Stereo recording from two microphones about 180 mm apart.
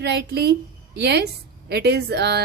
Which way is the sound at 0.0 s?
65° right (ahead or behind).